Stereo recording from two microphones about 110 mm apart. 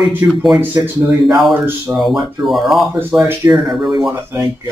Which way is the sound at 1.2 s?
Centre (ahead or behind).